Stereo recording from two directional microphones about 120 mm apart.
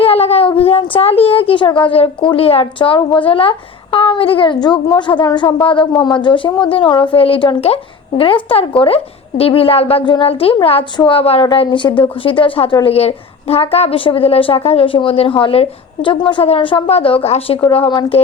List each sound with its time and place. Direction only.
0.0 s a sound: 55° left (ahead or behind)
1.8 s a woman's voice: 45° left (ahead or behind)
12.8 s a woman's voice: 60° left (ahead or behind)
17.6 s a woman's voice: 45° left (ahead or behind)